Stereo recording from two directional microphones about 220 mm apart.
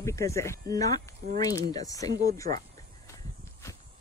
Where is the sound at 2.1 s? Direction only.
45° right (ahead or behind).